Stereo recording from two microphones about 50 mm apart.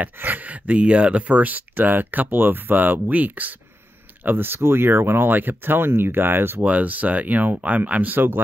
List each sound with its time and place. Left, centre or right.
0.0 s speech: right
4.6 s speech: right
6.6 s speech: right